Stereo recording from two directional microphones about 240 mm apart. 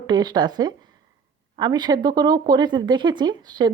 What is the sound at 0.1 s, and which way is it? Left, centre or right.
Speech, centre.